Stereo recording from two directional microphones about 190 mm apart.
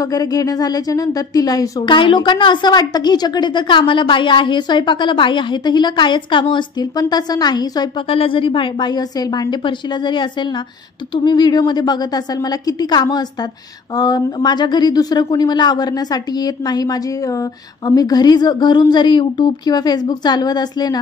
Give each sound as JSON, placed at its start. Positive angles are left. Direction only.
{"t": 0.0, "sound": "speech", "side_deg": 20}